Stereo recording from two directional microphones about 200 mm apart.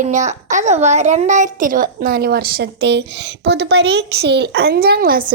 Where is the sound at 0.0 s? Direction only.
35° right (ahead or behind).